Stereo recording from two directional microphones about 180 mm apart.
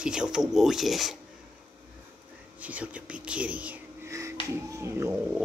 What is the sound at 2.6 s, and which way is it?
Speech, 5° right (ahead or behind).